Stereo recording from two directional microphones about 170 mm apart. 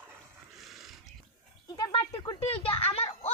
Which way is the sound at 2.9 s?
35° left (ahead or behind).